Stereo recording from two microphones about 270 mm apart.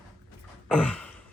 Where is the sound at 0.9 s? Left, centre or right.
Centre.